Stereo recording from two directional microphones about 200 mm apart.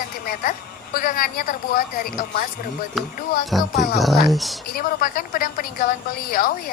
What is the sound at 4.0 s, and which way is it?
Speech, centre (ahead or behind).